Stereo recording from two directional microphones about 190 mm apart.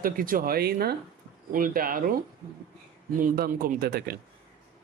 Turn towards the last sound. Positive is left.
turn(degrees=-55)  # may be behind; listen again after turning